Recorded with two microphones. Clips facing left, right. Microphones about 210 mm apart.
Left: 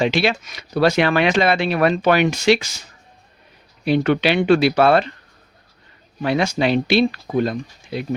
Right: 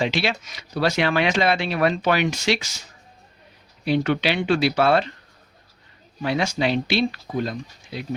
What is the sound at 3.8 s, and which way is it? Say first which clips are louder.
Speech: left 4 dB; 55° left (ahead or behind).